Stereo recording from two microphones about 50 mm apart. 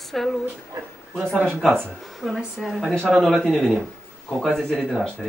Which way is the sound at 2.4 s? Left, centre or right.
Centre.